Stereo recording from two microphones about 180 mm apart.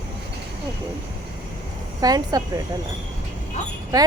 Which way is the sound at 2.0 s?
20° right (ahead or behind).